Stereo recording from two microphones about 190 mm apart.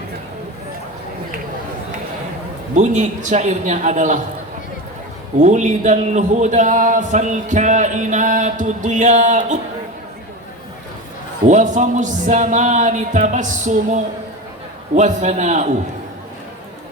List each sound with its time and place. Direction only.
2.7 s speech: 40° right (ahead or behind)
5.4 s speech: 40° right (ahead or behind)
11.4 s speech: 40° right (ahead or behind)